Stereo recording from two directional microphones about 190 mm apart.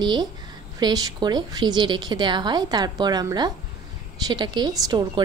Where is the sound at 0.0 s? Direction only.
25° right (ahead or behind).